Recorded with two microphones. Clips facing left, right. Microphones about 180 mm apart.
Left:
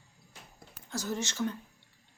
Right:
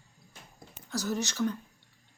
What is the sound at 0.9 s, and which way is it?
Speech, 25° left (ahead or behind).